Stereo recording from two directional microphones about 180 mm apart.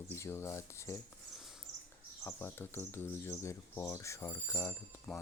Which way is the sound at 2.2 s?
15° left (ahead or behind).